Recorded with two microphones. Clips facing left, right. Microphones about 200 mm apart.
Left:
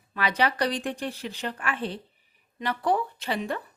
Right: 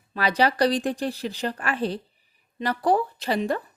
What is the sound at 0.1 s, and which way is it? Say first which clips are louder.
Speech: right 4 dB; 35° right (ahead or behind).